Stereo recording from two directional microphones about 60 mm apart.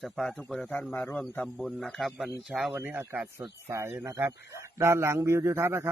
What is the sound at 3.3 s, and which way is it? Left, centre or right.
Speech, right.